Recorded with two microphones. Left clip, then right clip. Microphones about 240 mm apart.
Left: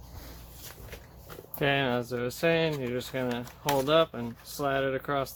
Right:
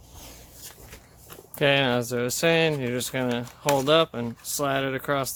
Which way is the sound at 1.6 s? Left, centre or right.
Right.